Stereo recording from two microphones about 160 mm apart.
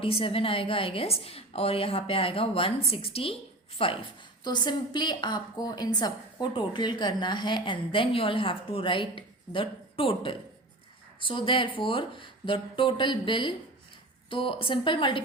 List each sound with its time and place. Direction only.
0.0 s a woman's voice: 35° left (ahead or behind)